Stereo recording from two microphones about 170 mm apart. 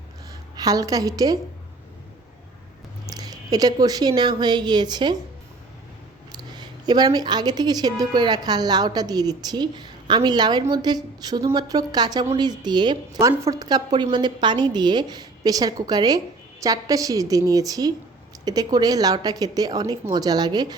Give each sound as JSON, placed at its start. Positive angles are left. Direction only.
{"t": 0.5, "sound": "a woman's voice", "side_deg": -20}
{"t": 3.1, "sound": "speech", "side_deg": -20}
{"t": 6.5, "sound": "a woman's voice", "side_deg": -25}